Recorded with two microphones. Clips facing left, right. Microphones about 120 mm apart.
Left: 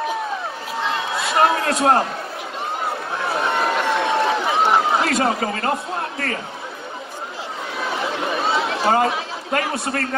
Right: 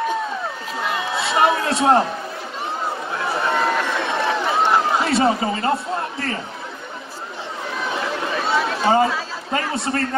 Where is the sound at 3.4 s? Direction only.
15° left (ahead or behind).